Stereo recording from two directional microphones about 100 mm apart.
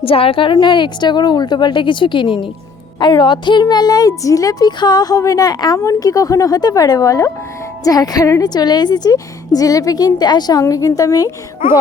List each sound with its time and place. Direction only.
0.0 s a woman's voice: 70° left (ahead or behind)
0.5 s a woman's voice: 50° left (ahead or behind)